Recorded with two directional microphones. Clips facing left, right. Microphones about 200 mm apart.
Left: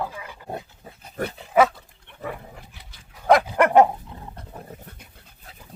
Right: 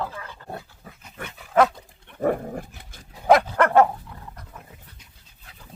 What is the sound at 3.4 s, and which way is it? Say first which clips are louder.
Dog: left 2 dB; 15° left (ahead or behind).